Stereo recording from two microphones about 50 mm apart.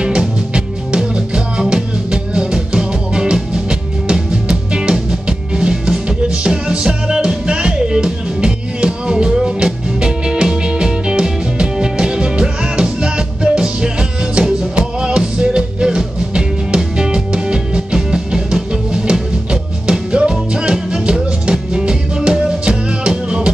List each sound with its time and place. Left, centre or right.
0.0 s music: centre